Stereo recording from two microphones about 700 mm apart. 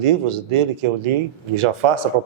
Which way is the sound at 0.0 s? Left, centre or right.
Right.